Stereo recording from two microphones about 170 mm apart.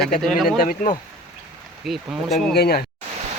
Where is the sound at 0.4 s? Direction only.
60° left (ahead or behind).